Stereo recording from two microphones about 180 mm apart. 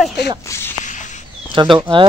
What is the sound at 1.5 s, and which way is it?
Speech, 25° right (ahead or behind).